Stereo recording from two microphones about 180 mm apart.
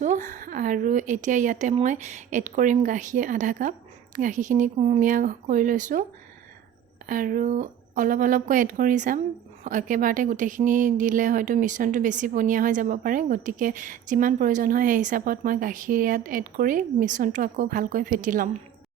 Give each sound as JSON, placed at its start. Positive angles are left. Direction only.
{"t": 0.0, "sound": "a woman's voice", "side_deg": -45}
{"t": 7.1, "sound": "a woman's voice", "side_deg": -50}